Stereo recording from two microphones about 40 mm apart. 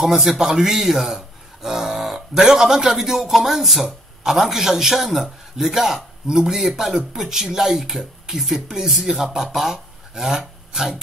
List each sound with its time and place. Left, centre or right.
0.0 s a man's voice: centre